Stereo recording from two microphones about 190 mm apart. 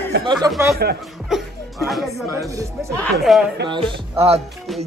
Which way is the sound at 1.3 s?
Centre (ahead or behind).